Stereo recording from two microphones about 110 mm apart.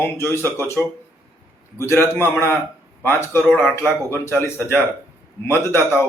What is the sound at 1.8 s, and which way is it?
A man's voice, 25° left (ahead or behind).